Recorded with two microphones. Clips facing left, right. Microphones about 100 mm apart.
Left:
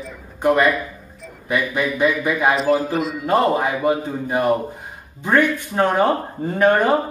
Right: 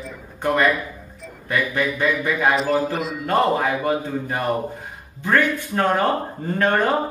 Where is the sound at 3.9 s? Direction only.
15° left (ahead or behind).